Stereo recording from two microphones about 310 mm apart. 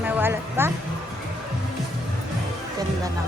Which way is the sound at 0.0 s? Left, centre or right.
Centre.